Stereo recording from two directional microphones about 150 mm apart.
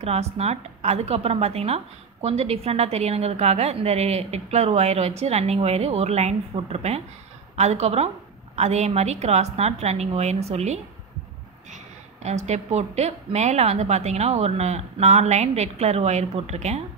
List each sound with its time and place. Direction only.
0.0 s a woman's voice: 45° right (ahead or behind)
11.7 s a sound: 50° right (ahead or behind)
12.4 s a woman's voice: 50° right (ahead or behind)